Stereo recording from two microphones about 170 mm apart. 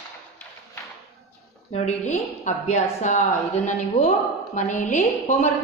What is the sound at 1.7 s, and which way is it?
A woman's voice, 40° left (ahead or behind).